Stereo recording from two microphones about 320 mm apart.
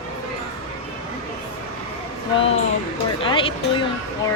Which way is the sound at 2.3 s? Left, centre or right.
Centre.